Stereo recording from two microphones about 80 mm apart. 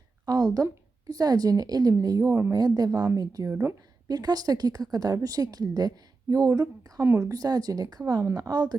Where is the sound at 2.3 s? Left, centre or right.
Right.